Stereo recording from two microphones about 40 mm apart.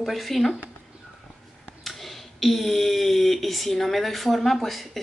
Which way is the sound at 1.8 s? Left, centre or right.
Centre.